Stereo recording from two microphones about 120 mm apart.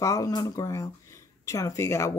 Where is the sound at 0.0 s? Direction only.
30° left (ahead or behind).